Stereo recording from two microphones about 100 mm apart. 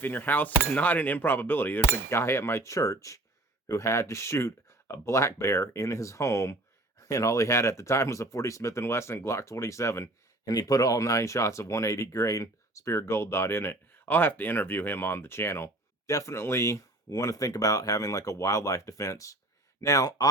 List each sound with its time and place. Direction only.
0.0 s speech: 20° left (ahead or behind); by 20.2 s 35° left (ahead or behind)